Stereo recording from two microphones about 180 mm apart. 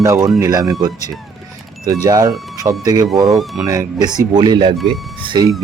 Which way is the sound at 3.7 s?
20° right (ahead or behind).